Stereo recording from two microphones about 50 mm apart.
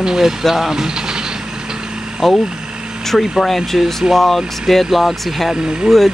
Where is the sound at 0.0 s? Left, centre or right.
Centre.